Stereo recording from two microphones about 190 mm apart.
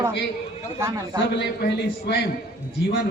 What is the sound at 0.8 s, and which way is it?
Speech, 15° right (ahead or behind).